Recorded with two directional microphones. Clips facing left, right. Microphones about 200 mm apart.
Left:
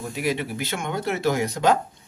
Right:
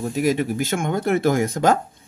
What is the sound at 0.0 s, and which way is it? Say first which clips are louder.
Speech: right 6 dB; 45° right (ahead or behind).